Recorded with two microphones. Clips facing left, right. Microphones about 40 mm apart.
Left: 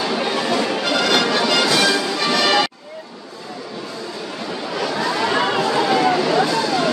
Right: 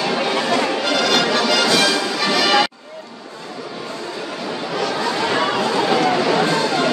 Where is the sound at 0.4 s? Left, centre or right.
Centre.